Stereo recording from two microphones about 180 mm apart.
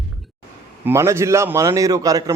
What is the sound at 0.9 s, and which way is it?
A man's voice, 15° right (ahead or behind).